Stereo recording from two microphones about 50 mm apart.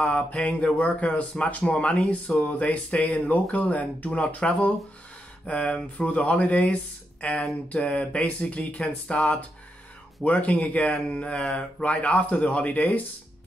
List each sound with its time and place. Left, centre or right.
0.0 s speech: left